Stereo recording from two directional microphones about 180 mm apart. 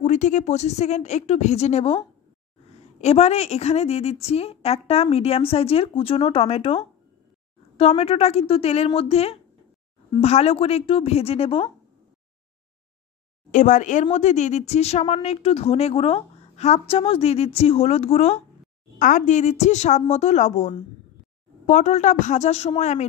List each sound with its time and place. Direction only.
0.0 s a woman's voice: 40° left (ahead or behind)
13.5 s a woman's voice: 45° left (ahead or behind)